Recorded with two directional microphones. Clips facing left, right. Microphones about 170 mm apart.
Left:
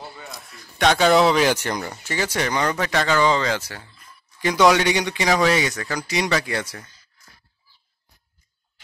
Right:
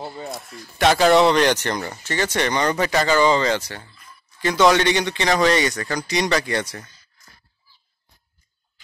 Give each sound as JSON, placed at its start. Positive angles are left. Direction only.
{"t": 0.0, "sound": "a man's voice", "side_deg": -40}
{"t": 0.5, "sound": "speech", "side_deg": 0}